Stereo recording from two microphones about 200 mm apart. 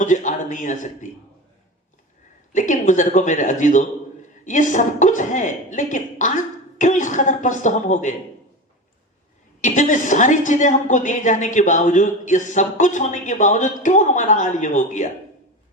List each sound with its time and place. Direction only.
0.0 s a man's voice: 40° left (ahead or behind)
2.6 s a woman's voice: 40° left (ahead or behind)
9.6 s a woman's voice: 40° left (ahead or behind)